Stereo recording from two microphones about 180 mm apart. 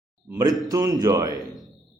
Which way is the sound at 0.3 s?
20° right (ahead or behind).